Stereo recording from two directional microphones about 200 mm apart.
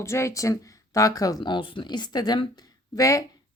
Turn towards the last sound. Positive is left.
turn(degrees=15)  # may be behind; listen again after turning